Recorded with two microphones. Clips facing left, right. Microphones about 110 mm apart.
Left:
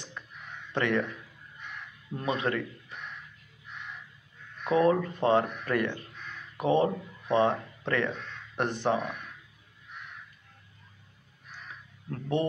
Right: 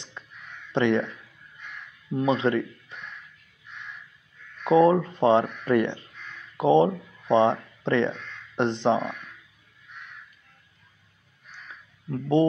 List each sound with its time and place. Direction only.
0.2 s crow: 20° right (ahead or behind)
0.7 s speech: 20° right (ahead or behind)
2.1 s speech: 25° right (ahead or behind)
4.6 s speech: 20° right (ahead or behind)
12.1 s speech: 20° right (ahead or behind)